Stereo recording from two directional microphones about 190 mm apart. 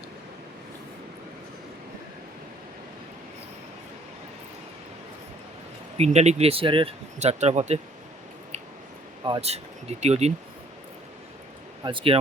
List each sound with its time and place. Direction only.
6.0 s speech: 35° right (ahead or behind)
9.2 s speech: 30° right (ahead or behind)
11.8 s speech: 25° right (ahead or behind)